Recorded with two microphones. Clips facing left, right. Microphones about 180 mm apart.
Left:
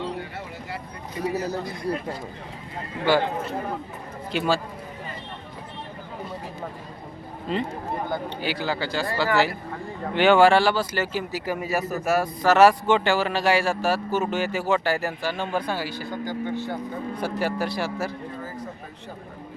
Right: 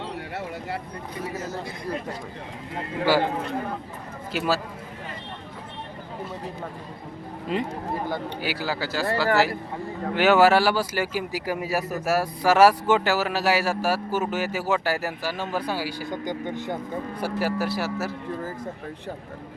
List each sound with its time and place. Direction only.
1.3 s a man's voice: 35° left (ahead or behind)
4.3 s speech: 5° right (ahead or behind)
7.5 s speech: 10° right (ahead or behind)
17.2 s speech: 10° right (ahead or behind)